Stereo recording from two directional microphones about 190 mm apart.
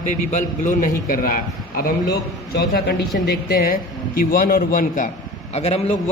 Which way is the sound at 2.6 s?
60° left (ahead or behind).